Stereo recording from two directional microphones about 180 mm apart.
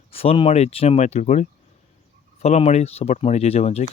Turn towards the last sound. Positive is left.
turn(degrees=35)  # may be behind; listen again after turning